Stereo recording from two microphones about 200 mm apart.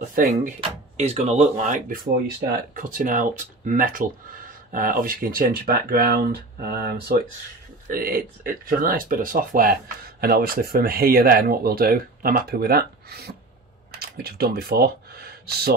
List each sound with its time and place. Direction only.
0.2 s speech: 45° right (ahead or behind)
0.6 s speech: 35° right (ahead or behind); by 15.7 s 50° right (ahead or behind)